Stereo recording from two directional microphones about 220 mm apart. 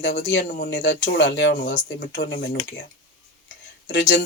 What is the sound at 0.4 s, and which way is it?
Speech, 40° left (ahead or behind).